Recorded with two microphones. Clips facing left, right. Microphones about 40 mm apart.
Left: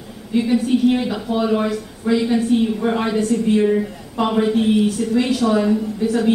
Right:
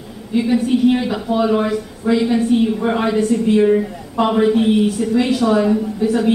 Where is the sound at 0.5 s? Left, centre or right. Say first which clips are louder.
Right 2 dB; centre.